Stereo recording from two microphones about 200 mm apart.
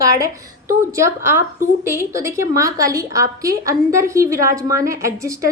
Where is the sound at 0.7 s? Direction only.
15° right (ahead or behind).